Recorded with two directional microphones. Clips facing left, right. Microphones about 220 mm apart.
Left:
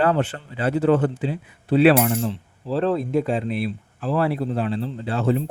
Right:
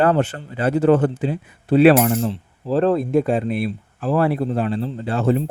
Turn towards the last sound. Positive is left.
turn(degrees=-50)  # may be behind; listen again after turning